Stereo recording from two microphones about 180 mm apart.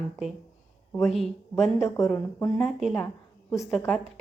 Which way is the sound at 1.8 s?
10° left (ahead or behind).